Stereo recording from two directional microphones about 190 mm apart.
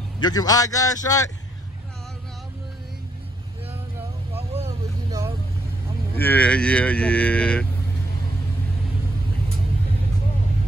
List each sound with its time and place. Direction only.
0.2 s a man's voice: 20° left (ahead or behind)
4.3 s vehicle: 30° right (ahead or behind)
4.6 s vehicle: 15° right (ahead or behind)
6.1 s speech: 10° left (ahead or behind)